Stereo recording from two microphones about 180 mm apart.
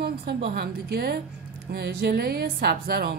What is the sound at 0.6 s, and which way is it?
A woman's voice, 60° right (ahead or behind).